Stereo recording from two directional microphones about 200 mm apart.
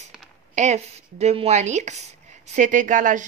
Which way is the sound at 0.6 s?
35° right (ahead or behind).